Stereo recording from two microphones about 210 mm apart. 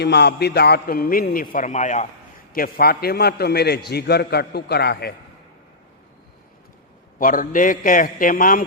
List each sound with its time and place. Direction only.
0.0 s a man's voice: 50° left (ahead or behind); by 2.0 s 35° left (ahead or behind)
2.5 s a man's voice: 45° left (ahead or behind)
7.2 s a man's voice: 40° left (ahead or behind)